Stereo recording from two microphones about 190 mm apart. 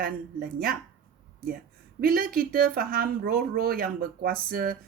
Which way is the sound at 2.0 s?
50° right (ahead or behind).